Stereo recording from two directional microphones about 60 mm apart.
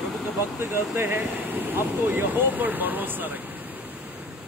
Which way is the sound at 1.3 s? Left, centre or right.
Right.